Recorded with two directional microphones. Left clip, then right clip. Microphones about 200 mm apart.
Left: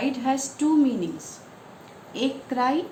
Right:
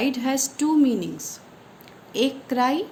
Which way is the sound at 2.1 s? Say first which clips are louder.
Right 4 dB; 55° right (ahead or behind).